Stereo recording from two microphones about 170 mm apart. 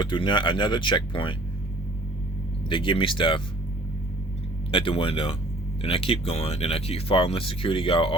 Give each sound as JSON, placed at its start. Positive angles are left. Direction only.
{"t": 0.0, "sound": "speech", "side_deg": 30}
{"t": 2.6, "sound": "speech", "side_deg": 30}
{"t": 4.7, "sound": "speech", "side_deg": 30}